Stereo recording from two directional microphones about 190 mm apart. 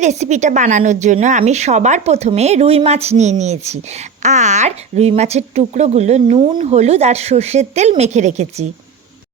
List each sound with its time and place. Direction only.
0.0 s speech: 35° right (ahead or behind)